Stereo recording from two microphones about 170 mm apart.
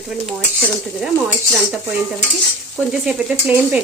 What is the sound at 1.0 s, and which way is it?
Stir, 5° right (ahead or behind).